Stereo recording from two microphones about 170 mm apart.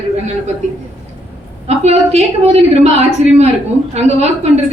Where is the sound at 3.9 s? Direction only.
40° right (ahead or behind).